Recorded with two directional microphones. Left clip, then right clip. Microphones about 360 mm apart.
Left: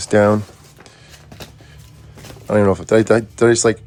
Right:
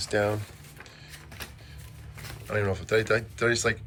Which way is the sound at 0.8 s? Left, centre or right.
Centre.